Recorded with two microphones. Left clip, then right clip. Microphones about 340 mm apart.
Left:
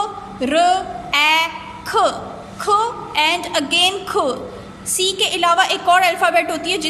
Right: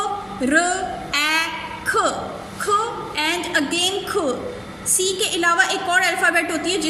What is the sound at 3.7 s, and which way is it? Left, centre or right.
Speech, centre.